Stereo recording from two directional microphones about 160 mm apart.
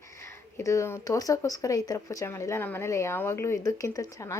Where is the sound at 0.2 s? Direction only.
15° left (ahead or behind).